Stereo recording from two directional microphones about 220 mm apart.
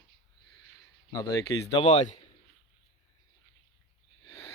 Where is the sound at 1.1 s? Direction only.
15° left (ahead or behind).